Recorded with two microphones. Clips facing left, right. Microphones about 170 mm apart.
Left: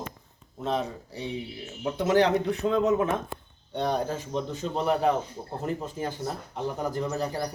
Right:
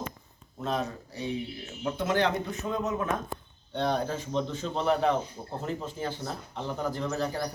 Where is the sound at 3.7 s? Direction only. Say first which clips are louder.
Left 1 dB; 10° left (ahead or behind).